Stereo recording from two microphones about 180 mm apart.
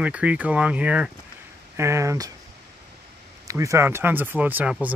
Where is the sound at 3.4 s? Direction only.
15° right (ahead or behind).